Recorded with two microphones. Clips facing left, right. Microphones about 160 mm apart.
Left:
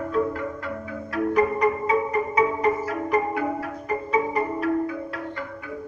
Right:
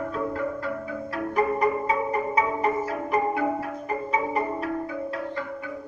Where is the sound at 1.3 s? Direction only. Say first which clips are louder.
Left 1 dB; 30° right (ahead or behind).